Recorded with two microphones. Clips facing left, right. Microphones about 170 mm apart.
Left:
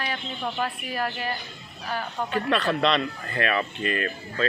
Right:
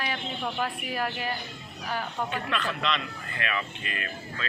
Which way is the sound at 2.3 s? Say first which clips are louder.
Left 7 dB; 35° left (ahead or behind).